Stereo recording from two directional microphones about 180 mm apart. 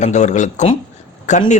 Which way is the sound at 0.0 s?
40° left (ahead or behind).